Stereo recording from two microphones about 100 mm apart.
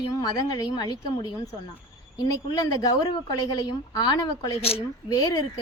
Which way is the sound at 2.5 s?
40° left (ahead or behind).